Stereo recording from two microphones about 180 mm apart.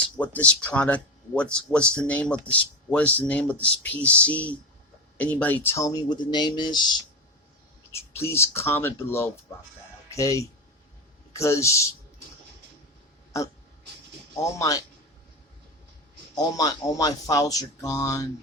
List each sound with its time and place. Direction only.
0.2 s speech: 10° left (ahead or behind); by 6.9 s 25° left (ahead or behind)
7.9 s speech: 15° left (ahead or behind)
14.3 s speech: 20° left (ahead or behind)
16.3 s speech: 20° left (ahead or behind)